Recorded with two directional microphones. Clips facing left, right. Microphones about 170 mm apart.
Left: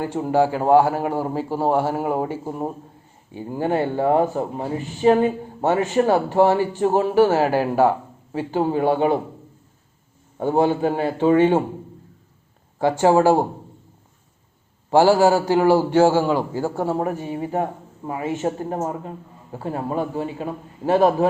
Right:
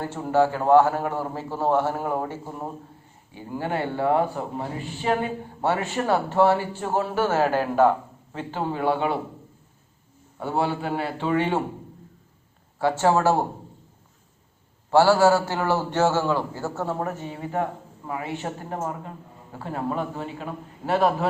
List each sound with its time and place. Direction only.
0.0 s a man's voice: 15° left (ahead or behind)
3.7 s speech: 40° left (ahead or behind)
4.4 s a man's voice: 20° left (ahead or behind)
8.8 s speech: 40° left (ahead or behind)
10.5 s a man's voice: 20° left (ahead or behind)
11.0 s speech: 45° left (ahead or behind)
12.8 s a man's voice: 15° left (ahead or behind)
14.8 s a man's voice: 15° left (ahead or behind)